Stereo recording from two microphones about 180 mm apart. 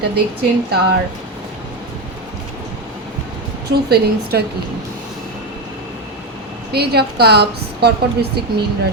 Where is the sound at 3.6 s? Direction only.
65° right (ahead or behind).